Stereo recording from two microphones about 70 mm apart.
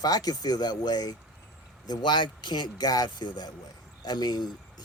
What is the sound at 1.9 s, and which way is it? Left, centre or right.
Speech, left.